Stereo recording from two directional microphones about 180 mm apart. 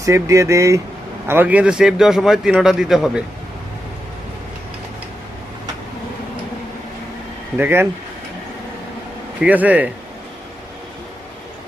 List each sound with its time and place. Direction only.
0.0 s a man's voice: 15° right (ahead or behind)
7.6 s speech: 15° right (ahead or behind)
9.4 s speech: 10° right (ahead or behind)